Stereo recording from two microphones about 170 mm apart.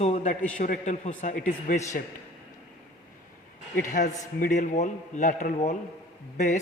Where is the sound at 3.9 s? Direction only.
50° left (ahead or behind).